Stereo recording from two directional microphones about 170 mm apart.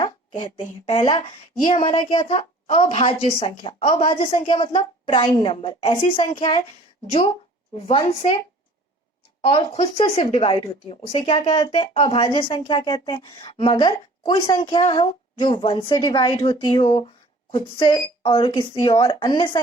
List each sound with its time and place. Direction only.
0.0 s a woman's voice: 30° left (ahead or behind)
7.8 s a woman's voice: 35° left (ahead or behind)
9.5 s speech: 35° left (ahead or behind)